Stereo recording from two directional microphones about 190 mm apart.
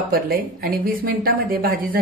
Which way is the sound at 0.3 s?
50° right (ahead or behind).